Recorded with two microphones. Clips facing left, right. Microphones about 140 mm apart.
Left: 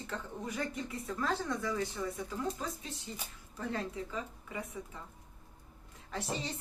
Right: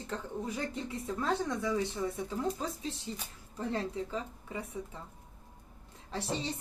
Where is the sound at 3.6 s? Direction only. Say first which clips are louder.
Right 3 dB; 30° right (ahead or behind).